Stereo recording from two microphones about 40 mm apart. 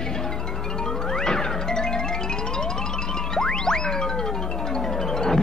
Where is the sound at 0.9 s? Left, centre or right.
Centre.